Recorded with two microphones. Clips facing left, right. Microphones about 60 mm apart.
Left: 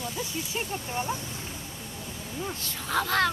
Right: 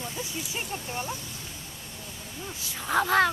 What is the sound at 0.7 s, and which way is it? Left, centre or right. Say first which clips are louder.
Speech: left 2 dB; centre.